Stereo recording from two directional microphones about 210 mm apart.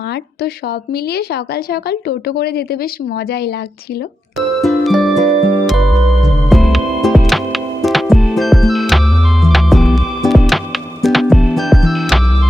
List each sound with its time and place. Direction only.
0.4 s speech: 50° left (ahead or behind)
4.6 s music: centre (ahead or behind)